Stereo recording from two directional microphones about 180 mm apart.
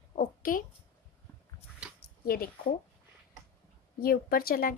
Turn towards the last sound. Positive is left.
turn(degrees=55)  # may be behind; listen again after turning